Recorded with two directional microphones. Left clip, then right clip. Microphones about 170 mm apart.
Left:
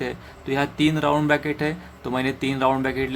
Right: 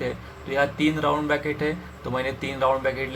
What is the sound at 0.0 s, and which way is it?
Speech, 55° left (ahead or behind).